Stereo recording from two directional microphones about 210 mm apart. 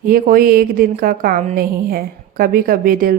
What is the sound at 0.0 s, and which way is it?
A woman's voice, 40° right (ahead or behind).